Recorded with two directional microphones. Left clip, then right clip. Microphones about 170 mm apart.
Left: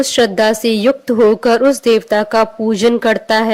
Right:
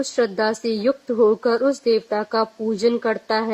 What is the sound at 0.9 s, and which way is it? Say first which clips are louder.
Speech: left 6 dB; 35° left (ahead or behind).